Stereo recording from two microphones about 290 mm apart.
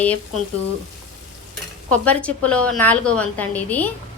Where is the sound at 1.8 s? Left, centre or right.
Centre.